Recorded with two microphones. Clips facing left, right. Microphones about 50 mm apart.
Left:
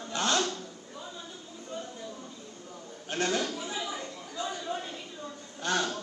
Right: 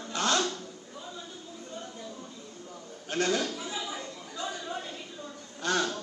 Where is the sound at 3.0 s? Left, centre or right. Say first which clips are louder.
Right 1 dB; left.